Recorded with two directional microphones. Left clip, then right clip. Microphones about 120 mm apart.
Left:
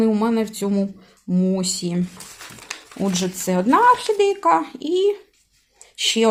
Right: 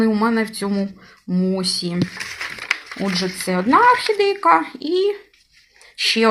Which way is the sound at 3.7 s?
20° left (ahead or behind).